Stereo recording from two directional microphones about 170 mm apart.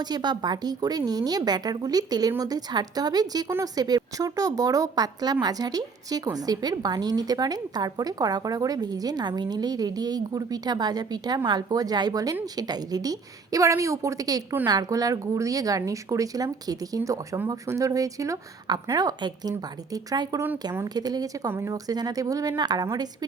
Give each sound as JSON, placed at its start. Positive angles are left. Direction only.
{"t": 0.0, "sound": "a woman's voice", "side_deg": -25}